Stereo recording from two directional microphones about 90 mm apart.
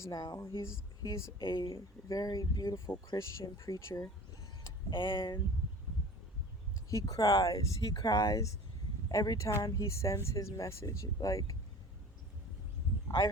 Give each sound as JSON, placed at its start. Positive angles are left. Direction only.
{"t": 0.1, "sound": "speech", "side_deg": 50}
{"t": 0.3, "sound": "speech", "side_deg": 35}
{"t": 1.4, "sound": "speech", "side_deg": 55}
{"t": 1.6, "sound": "speech", "side_deg": 35}
{"t": 4.9, "sound": "speech", "side_deg": 60}
{"t": 6.9, "sound": "speech", "side_deg": 40}